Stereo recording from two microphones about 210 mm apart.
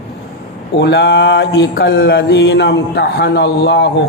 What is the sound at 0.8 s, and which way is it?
Mantra, 55° left (ahead or behind).